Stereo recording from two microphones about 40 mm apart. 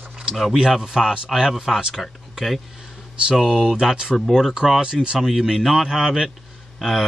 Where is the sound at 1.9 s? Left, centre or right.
Centre.